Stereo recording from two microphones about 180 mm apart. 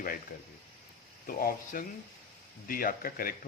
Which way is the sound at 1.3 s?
55° left (ahead or behind).